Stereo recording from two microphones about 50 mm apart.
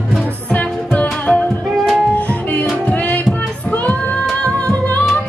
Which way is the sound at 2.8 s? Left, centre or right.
Left.